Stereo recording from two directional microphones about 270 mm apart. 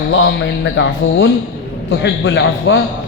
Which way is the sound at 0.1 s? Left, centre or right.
Left.